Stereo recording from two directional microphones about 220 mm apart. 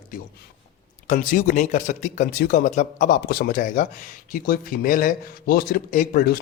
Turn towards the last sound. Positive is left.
turn(degrees=40)  # may be behind; listen again after turning